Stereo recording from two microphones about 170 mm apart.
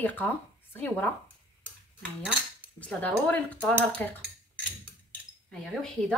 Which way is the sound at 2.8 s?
10° left (ahead or behind).